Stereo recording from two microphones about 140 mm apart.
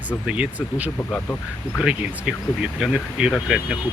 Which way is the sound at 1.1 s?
10° left (ahead or behind).